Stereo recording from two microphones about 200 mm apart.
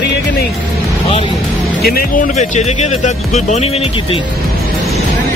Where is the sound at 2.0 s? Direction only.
40° left (ahead or behind).